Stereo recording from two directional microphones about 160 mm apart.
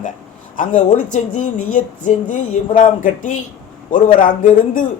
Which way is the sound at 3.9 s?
60° left (ahead or behind).